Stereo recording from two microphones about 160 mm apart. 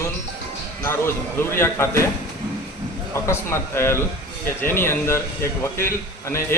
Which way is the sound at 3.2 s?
15° left (ahead or behind).